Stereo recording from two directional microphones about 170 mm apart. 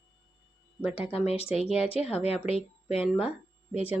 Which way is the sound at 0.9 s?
35° left (ahead or behind).